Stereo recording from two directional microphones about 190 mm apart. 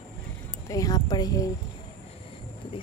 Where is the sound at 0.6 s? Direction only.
20° left (ahead or behind).